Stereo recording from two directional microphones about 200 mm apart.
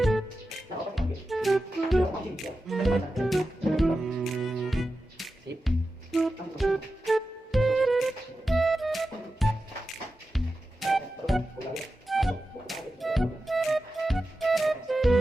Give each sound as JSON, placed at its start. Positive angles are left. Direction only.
{"t": 0.9, "sound": "music", "side_deg": 0}